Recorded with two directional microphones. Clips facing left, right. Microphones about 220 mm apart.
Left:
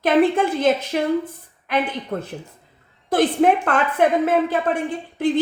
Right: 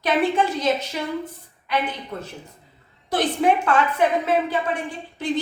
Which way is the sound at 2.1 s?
45° left (ahead or behind).